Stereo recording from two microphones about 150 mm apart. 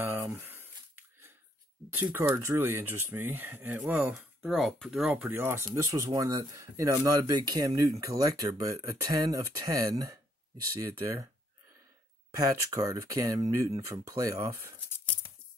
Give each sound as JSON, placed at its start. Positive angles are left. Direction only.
{"t": 0.0, "sound": "a sound", "side_deg": -15}
{"t": 2.1, "sound": "speech", "side_deg": -15}
{"t": 4.4, "sound": "speech", "side_deg": 0}
{"t": 5.1, "sound": "speech", "side_deg": -10}
{"t": 12.4, "sound": "speech", "side_deg": -20}